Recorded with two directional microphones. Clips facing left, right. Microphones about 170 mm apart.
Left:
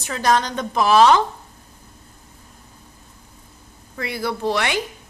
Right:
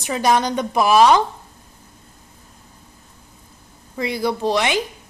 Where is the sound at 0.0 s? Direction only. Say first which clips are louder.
Right 2 dB; 15° right (ahead or behind).